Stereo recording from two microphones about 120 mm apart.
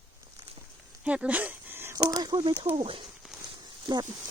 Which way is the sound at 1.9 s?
30° right (ahead or behind).